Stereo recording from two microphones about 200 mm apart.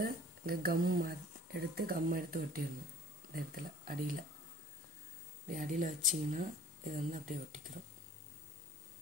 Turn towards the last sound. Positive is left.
turn(degrees=-40)  # may be behind; listen again after turning